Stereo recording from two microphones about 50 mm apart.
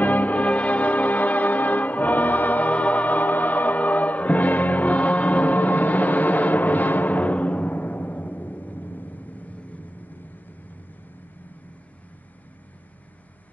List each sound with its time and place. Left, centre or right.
0.0 s church bell: left